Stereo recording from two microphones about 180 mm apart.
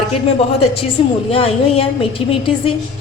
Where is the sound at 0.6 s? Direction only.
30° left (ahead or behind).